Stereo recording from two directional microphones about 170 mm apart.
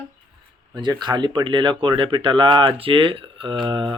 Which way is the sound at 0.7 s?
25° right (ahead or behind).